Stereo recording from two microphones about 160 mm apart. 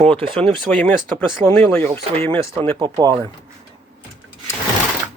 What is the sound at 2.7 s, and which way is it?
Speech, 20° right (ahead or behind).